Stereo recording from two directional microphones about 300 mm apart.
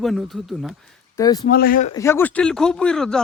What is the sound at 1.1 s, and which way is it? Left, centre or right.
Speech, centre.